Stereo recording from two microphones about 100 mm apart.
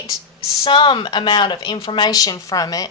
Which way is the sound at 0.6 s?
50° left (ahead or behind).